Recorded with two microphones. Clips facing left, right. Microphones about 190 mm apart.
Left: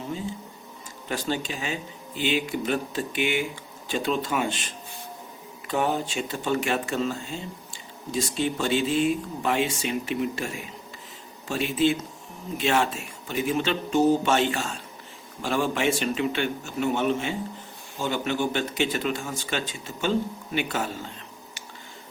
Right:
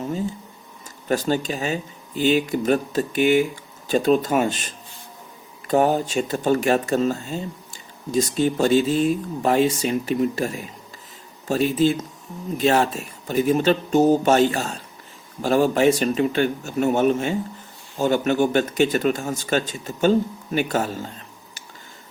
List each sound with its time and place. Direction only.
1.0 s speech: 45° right (ahead or behind)